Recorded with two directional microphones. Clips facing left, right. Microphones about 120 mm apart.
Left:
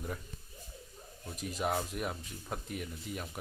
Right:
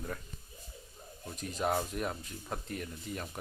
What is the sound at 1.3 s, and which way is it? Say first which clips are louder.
Speech: right 1 dB; 5° left (ahead or behind).